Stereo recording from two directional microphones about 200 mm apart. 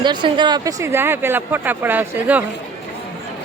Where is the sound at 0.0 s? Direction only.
20° right (ahead or behind).